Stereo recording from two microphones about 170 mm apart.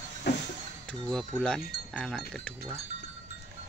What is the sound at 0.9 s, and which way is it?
Wind chime, centre (ahead or behind).